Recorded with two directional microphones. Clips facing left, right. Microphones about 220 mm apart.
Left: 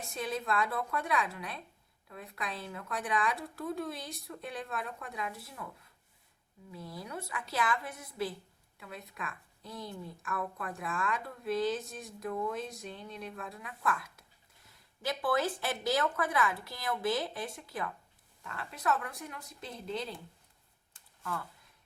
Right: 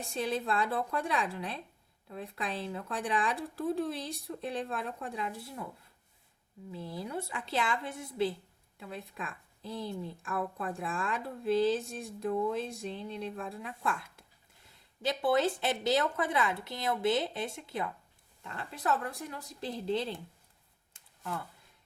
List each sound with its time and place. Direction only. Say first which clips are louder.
0.1 s a woman's voice: right 2 dB; 30° right (ahead or behind)
6.7 s a woman's voice: right 4 dB; 30° right (ahead or behind)